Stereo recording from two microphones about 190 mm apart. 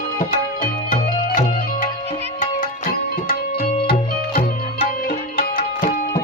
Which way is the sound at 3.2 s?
50° left (ahead or behind).